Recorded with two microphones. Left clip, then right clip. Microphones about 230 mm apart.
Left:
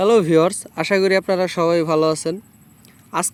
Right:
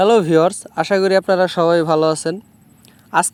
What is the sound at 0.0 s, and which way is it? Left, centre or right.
Speech, centre.